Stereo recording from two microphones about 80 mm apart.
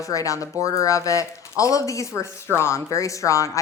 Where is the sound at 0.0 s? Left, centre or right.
Left.